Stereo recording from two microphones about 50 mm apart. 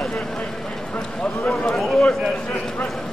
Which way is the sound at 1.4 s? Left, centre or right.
Centre.